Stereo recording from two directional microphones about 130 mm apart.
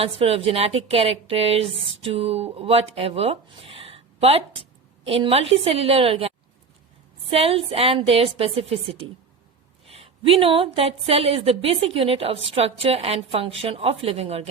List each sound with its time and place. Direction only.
0.0 s a woman's voice: 45° right (ahead or behind)